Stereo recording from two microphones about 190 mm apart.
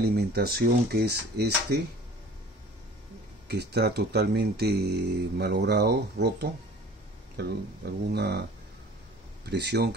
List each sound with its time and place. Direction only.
0.0 s speech: 55° right (ahead or behind)
3.4 s speech: 60° right (ahead or behind)
9.5 s speech: 60° right (ahead or behind)